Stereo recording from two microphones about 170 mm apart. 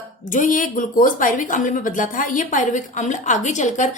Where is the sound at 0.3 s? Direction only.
50° left (ahead or behind).